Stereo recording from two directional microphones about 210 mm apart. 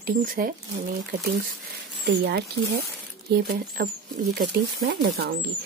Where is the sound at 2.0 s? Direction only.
55° right (ahead or behind).